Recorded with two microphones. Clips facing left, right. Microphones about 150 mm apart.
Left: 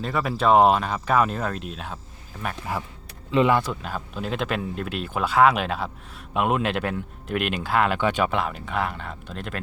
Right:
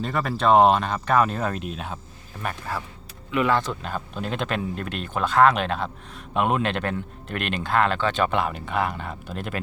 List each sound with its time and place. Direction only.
0.0 s speech: 5° left (ahead or behind)
2.7 s speech: 15° left (ahead or behind); by 9.6 s 5° right (ahead or behind)